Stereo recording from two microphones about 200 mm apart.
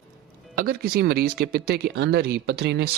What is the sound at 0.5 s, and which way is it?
Speech, 50° right (ahead or behind).